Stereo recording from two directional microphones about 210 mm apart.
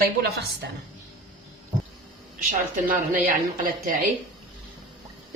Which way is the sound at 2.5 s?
40° right (ahead or behind).